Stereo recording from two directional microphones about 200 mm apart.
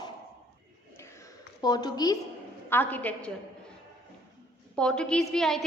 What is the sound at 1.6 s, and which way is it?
Speech, 20° left (ahead or behind).